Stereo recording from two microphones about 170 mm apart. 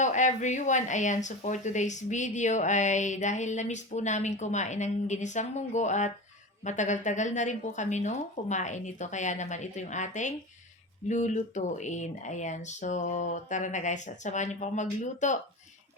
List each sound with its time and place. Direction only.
0.0 s speech: 45° left (ahead or behind)